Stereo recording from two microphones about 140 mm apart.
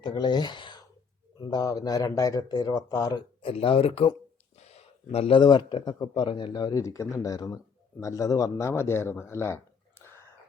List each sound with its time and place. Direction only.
0.0 s speech: 30° left (ahead or behind)
3.5 s speech: 40° left (ahead or behind)
4.5 s a sound: 50° left (ahead or behind)
5.4 s speech: 35° left (ahead or behind); by 10.2 s 15° left (ahead or behind)